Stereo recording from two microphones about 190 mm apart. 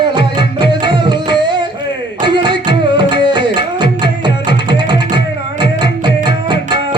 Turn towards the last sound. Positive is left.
turn(degrees=-25)  # may be behind; listen again after turning